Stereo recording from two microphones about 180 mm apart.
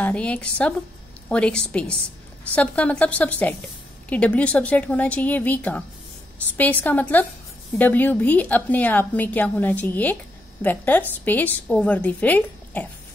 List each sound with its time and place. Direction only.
0.0 s a woman's voice: 5° left (ahead or behind)